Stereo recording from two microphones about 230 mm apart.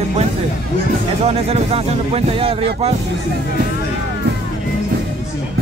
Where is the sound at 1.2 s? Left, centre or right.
Right.